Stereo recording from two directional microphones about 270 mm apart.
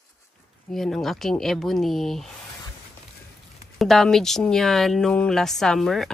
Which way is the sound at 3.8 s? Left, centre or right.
Centre.